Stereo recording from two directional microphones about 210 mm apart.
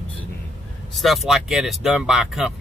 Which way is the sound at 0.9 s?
Centre (ahead or behind).